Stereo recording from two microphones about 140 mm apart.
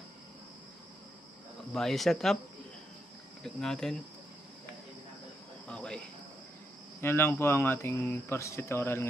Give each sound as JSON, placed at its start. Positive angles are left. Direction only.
{"t": 1.7, "sound": "speech", "side_deg": 0}
{"t": 3.4, "sound": "speech", "side_deg": 5}
{"t": 5.7, "sound": "cricket", "side_deg": 5}
{"t": 7.0, "sound": "speech", "side_deg": 15}